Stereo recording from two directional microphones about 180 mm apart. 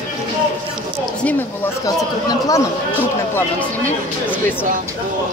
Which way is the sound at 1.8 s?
20° left (ahead or behind).